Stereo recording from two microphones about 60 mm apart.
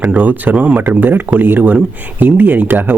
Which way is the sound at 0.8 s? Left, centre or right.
Right.